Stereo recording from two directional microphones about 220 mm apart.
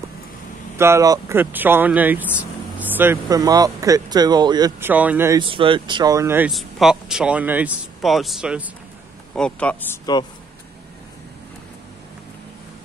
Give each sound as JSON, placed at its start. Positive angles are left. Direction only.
{"t": 0.7, "sound": "speech", "side_deg": -10}
{"t": 5.4, "sound": "speech", "side_deg": -25}
{"t": 10.1, "sound": "a man's voice", "side_deg": 20}